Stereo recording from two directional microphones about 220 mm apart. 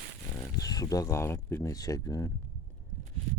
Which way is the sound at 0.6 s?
15° left (ahead or behind).